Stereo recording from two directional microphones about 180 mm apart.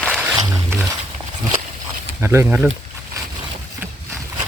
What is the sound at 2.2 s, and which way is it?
Speech, 15° right (ahead or behind).